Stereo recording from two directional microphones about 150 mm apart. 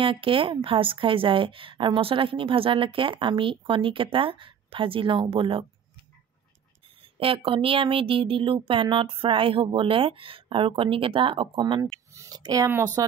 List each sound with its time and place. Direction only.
0.0 s speech: 35° right (ahead or behind)
7.0 s speech: 35° right (ahead or behind); by 13.0 s 20° right (ahead or behind)